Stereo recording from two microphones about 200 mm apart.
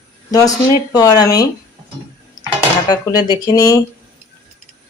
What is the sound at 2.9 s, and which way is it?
Speech, 20° left (ahead or behind).